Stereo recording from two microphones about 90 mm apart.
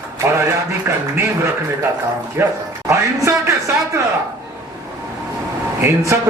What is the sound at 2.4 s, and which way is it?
A man's voice, 25° right (ahead or behind).